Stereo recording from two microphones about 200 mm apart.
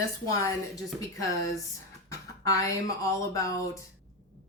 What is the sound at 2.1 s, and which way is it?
Speech, 15° left (ahead or behind).